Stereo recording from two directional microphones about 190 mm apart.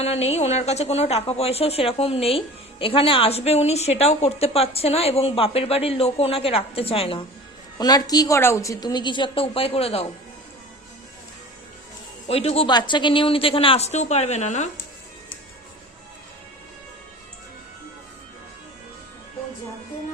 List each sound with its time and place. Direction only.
0.0 s a woman's voice: 35° left (ahead or behind)
12.3 s a woman's voice: 30° left (ahead or behind)